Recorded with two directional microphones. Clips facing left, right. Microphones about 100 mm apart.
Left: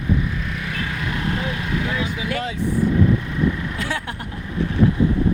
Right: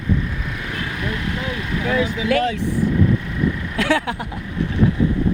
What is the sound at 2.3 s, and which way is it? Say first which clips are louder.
Speech: right 10 dB; 90° right.